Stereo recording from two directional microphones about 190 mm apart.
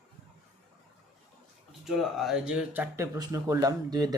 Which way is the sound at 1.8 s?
Centre (ahead or behind).